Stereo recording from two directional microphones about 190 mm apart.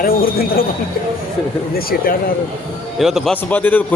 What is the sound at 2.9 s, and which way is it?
Speech, centre (ahead or behind).